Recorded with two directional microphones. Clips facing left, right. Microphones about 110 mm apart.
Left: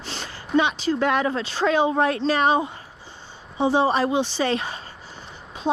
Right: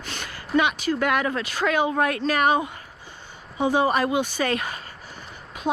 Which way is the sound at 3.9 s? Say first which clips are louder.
Left 1 dB; 30° left (ahead or behind).